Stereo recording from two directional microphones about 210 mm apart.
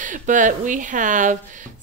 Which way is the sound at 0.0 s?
35° right (ahead or behind).